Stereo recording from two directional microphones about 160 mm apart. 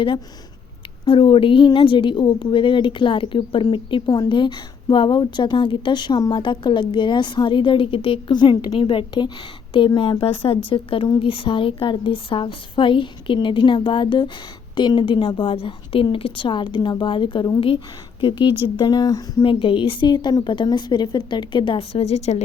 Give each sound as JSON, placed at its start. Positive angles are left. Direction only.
{"t": 1.0, "sound": "a woman's voice", "side_deg": 35}